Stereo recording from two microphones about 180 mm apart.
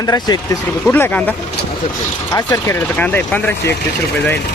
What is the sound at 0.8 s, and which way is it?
Speech, 10° left (ahead or behind).